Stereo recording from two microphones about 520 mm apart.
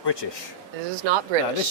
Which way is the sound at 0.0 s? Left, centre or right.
Left.